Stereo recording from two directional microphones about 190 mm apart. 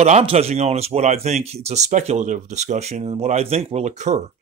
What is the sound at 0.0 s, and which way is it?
Speech, 35° right (ahead or behind).